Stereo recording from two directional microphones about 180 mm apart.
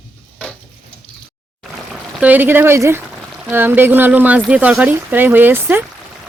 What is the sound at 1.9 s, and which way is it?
Speech, 5° right (ahead or behind).